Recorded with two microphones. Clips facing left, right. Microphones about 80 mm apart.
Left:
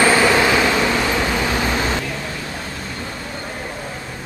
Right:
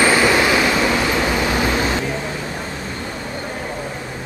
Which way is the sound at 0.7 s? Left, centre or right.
Centre.